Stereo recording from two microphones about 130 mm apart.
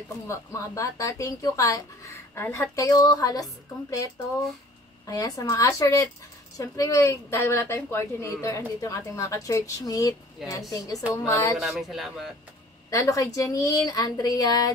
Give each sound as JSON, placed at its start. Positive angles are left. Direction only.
{"t": 0.3, "sound": "a woman's voice", "side_deg": 25}
{"t": 11.6, "sound": "speech", "side_deg": 0}
{"t": 12.9, "sound": "a woman's voice", "side_deg": 25}